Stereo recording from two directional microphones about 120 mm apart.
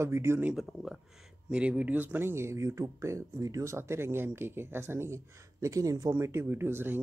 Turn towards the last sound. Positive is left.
turn(degrees=-20)  # may be behind; listen again after turning